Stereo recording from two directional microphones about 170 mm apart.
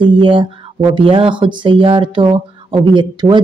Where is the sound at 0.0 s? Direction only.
30° right (ahead or behind).